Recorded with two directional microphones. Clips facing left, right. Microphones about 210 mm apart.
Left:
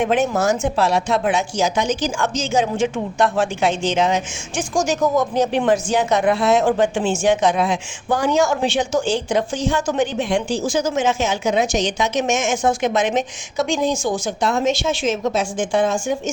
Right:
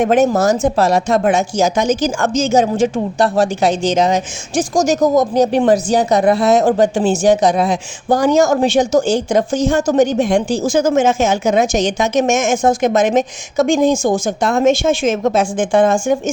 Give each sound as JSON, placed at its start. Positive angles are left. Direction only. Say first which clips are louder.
{"t": 0.0, "sound": "a woman's voice", "louder": "right 5 dB", "side_deg": -40}